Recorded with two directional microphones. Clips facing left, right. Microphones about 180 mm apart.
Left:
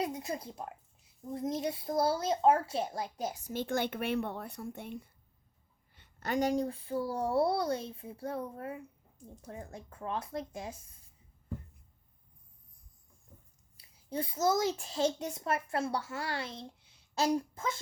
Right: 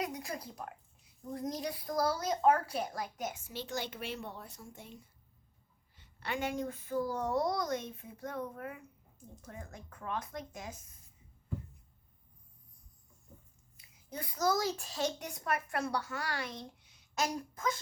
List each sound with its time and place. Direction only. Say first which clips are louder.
0.0 s a child's voice: left 3 dB; 25° left (ahead or behind); by 5.0 s 60° left (ahead or behind)
6.0 s speech: left 6 dB; 45° left (ahead or behind)
13.7 s a child's voice: left 7 dB; 30° left (ahead or behind)